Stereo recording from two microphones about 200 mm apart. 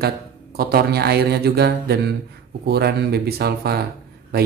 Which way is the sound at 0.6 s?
50° right (ahead or behind).